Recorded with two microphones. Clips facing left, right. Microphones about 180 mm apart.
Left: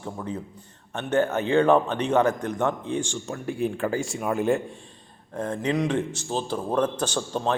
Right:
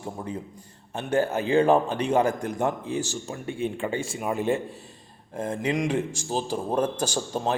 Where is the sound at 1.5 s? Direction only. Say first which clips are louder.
Even; 35° right (ahead or behind).